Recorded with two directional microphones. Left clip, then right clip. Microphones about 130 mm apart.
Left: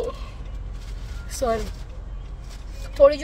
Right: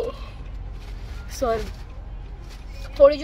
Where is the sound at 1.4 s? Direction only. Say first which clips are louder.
Even; 25° left (ahead or behind).